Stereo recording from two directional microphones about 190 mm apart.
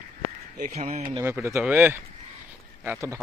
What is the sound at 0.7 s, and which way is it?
Speech, 40° right (ahead or behind).